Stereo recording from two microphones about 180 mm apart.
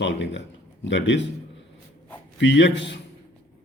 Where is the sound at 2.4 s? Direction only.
80° left.